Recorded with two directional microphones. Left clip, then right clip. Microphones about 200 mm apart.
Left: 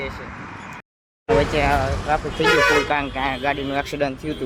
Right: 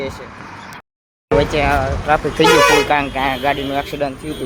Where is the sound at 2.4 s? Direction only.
60° right (ahead or behind).